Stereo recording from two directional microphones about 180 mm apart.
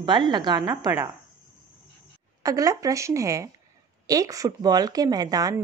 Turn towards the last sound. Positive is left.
turn(degrees=-20)  # may be behind; listen again after turning